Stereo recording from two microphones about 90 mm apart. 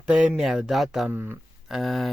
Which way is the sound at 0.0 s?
10° right (ahead or behind).